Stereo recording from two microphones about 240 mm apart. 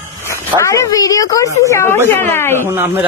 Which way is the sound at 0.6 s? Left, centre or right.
Centre.